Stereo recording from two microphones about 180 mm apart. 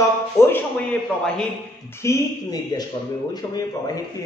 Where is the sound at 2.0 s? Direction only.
20° left (ahead or behind).